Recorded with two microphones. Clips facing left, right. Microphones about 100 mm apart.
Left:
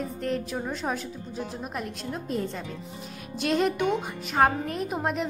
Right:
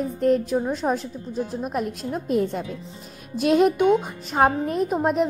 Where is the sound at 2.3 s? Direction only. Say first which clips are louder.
Right 9 dB; 55° right (ahead or behind).